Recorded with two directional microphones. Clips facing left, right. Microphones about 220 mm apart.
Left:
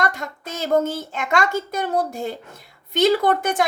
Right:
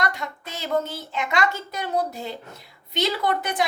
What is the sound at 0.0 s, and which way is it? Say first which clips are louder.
A woman's voice: left 3 dB; 45° left (ahead or behind).